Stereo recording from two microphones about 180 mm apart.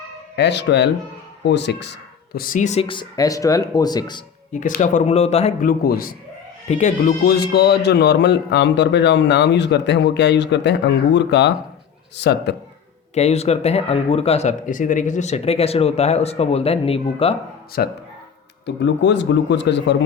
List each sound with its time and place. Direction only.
0.3 s a man's voice: 75° left (ahead or behind); by 4.2 s 25° left (ahead or behind)
4.5 s speech: 45° left (ahead or behind)
5.6 s a man's voice: 55° left (ahead or behind)
6.7 s speech: 40° left (ahead or behind)
7.3 s a man's voice: 60° left (ahead or behind)
13.1 s speech: 35° left (ahead or behind)
17.8 s speech: 55° left (ahead or behind)
18.6 s speech: 80° left